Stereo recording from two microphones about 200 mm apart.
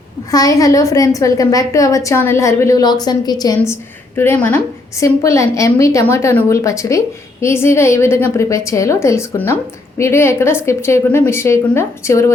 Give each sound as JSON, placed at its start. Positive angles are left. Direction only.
{"t": 0.3, "sound": "a woman's voice", "side_deg": 20}